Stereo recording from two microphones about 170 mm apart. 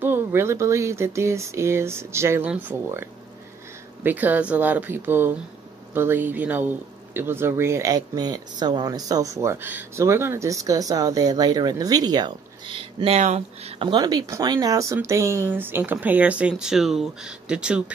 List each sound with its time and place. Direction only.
0.0 s speech: 15° right (ahead or behind)